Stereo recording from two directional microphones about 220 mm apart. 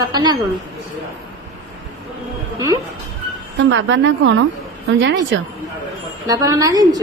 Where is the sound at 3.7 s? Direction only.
60° right (ahead or behind).